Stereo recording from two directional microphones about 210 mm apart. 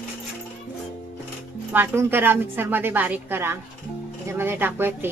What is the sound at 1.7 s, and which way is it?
A woman's voice, 10° right (ahead or behind).